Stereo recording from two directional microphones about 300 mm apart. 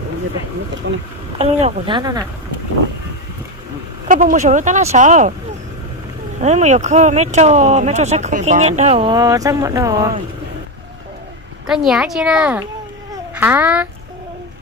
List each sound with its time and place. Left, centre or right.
0.8 s speech: right
1.4 s speech: centre
4.1 s speech: right
6.4 s speech: right
11.6 s speech: centre